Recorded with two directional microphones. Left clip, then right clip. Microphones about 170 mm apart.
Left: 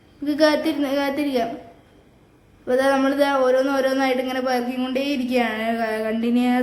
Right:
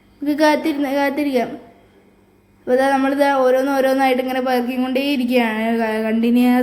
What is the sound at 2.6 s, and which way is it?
Speech, 15° right (ahead or behind).